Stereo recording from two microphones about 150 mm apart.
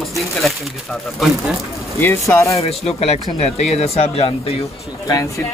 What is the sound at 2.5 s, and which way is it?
Speech, 40° left (ahead or behind).